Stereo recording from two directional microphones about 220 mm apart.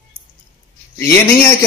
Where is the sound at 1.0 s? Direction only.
10° left (ahead or behind).